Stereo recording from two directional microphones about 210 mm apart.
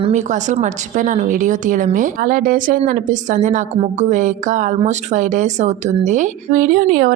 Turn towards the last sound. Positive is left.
turn(degrees=-40)  # may be behind; listen again after turning